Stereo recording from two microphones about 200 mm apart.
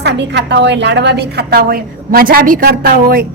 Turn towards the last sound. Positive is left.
turn(degrees=-50)  # may be behind; listen again after turning